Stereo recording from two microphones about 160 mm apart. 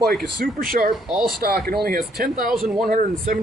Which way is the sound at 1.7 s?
75° right (ahead or behind).